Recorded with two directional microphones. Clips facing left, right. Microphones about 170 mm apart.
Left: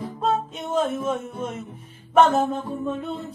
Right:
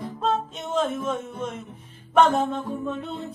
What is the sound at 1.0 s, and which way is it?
Speech, 10° left (ahead or behind).